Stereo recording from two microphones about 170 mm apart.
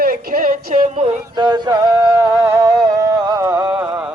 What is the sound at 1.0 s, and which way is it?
Music, 30° right (ahead or behind).